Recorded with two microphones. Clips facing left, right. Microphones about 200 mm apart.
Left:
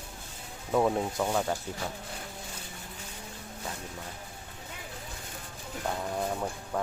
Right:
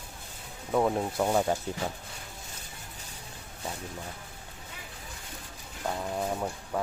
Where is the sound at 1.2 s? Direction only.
15° right (ahead or behind).